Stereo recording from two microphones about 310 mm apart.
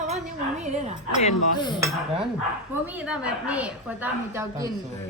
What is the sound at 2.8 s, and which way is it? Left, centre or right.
Speech, centre.